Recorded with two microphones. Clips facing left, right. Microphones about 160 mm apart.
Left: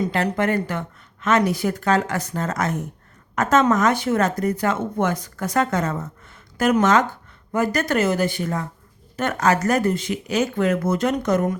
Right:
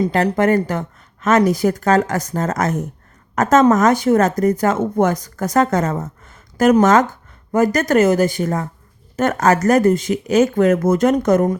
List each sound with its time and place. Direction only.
0.0 s speech: 40° right (ahead or behind)